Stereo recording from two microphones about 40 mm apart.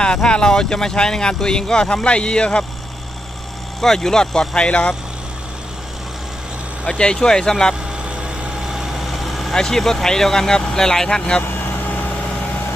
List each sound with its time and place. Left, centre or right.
0.0 s speech: left
3.8 s speech: centre; by 4.9 s left
6.8 s speech: left
8.7 s vehicle: centre
9.6 s speech: centre